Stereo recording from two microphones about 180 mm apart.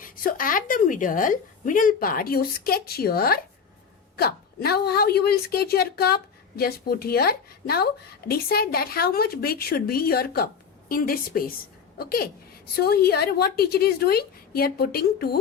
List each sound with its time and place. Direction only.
0.0 s a woman's voice: 50° left (ahead or behind)